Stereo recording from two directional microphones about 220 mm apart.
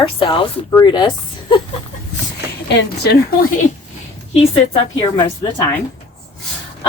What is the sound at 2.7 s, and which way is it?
Speech, 50° left (ahead or behind).